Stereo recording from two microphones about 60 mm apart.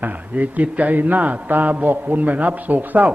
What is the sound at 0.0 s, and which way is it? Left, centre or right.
A man's voice, right.